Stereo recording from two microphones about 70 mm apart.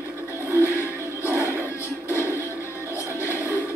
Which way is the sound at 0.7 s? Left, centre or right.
Left.